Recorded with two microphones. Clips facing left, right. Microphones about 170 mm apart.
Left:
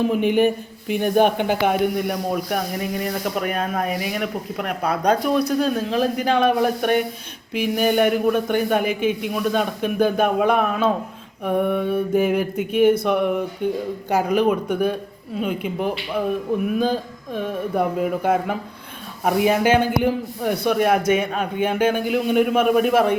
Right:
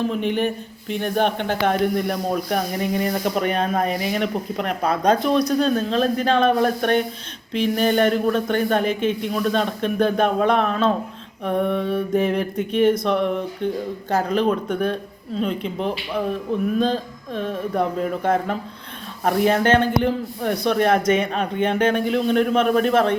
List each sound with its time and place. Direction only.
0.0 s a man's voice: 10° left (ahead or behind)